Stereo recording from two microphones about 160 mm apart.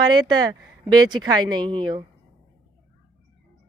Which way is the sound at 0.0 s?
25° right (ahead or behind).